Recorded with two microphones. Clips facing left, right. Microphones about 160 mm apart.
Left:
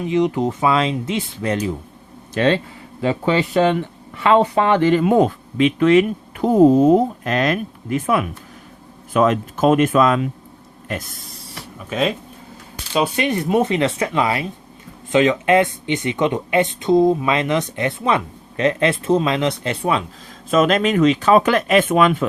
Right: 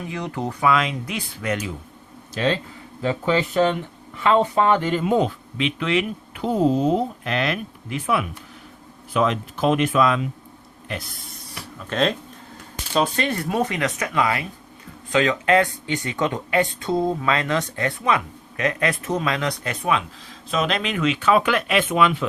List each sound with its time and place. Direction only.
0.0 s speech: 20° left (ahead or behind)
0.7 s speech: 30° left (ahead or behind)
2.3 s speech: 65° left (ahead or behind)
3.0 s speech: 85° left; by 10.2 s 45° left (ahead or behind)
11.9 s speech: 5° left (ahead or behind); by 20.1 s 30° left (ahead or behind)
20.5 s speech: 45° left (ahead or behind)